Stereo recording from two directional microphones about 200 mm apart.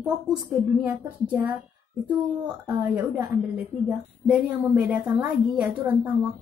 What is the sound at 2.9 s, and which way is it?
A woman's voice, 5° right (ahead or behind).